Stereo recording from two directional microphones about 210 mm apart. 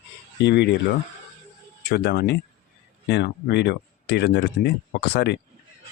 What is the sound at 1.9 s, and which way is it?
Speech, 50° left (ahead or behind).